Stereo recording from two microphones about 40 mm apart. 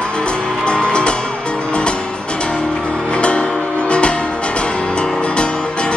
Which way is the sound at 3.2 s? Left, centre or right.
Left.